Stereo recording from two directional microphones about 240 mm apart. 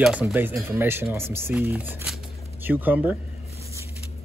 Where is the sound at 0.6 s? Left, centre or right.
Centre.